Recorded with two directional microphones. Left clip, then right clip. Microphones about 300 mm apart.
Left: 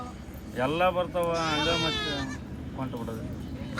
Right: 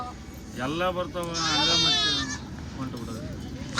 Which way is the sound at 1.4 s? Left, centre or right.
Left.